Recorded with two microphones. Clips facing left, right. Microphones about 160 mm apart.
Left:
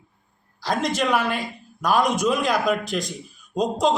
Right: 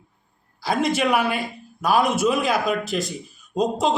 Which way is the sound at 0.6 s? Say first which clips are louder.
Right 2 dB; 10° right (ahead or behind).